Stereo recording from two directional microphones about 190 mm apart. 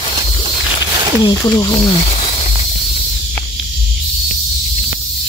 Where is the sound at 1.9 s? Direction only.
30° left (ahead or behind).